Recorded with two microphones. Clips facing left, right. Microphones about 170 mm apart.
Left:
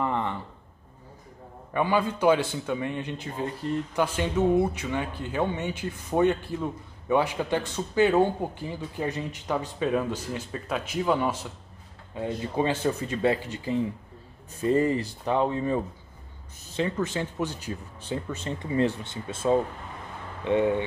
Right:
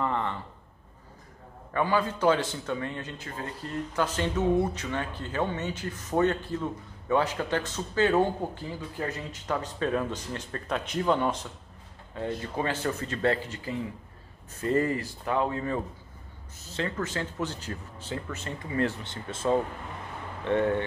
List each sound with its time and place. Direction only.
0.0 s a sound: 15° left (ahead or behind)
1.7 s speech: 15° left (ahead or behind)
20.4 s speech: 15° left (ahead or behind)